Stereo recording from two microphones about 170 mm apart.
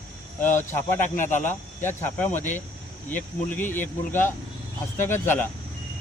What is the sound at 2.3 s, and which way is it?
Speech, 45° left (ahead or behind).